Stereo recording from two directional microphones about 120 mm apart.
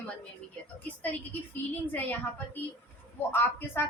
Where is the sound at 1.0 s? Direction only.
15° left (ahead or behind).